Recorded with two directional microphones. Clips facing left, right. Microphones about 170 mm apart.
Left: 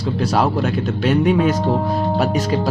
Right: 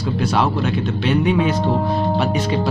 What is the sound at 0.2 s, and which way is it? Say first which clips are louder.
Speech: left 1 dB; 40° left (ahead or behind).